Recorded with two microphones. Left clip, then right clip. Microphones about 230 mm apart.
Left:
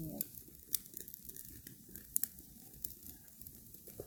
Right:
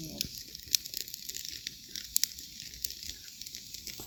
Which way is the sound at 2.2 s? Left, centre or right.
Left.